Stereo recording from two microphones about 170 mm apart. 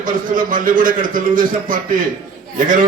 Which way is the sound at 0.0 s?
50° right (ahead or behind).